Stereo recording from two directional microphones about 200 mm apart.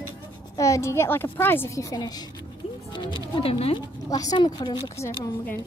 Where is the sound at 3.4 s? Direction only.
30° left (ahead or behind).